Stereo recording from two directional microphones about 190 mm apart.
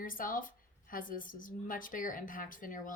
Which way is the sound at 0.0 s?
45° left (ahead or behind).